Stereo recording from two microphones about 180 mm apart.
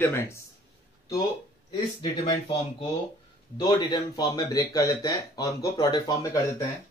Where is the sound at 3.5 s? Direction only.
25° left (ahead or behind).